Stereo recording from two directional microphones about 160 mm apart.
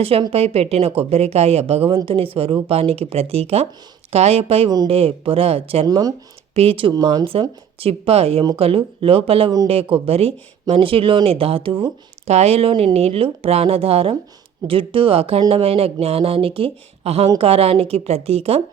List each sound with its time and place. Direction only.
0.0 s speech: 35° right (ahead or behind)
6.5 s speech: 35° right (ahead or behind)